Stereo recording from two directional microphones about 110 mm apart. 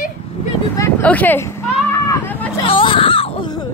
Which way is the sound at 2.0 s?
20° left (ahead or behind).